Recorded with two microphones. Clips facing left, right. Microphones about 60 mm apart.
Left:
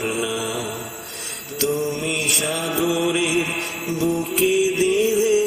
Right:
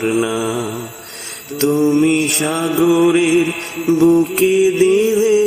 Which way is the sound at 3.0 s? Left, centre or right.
Right.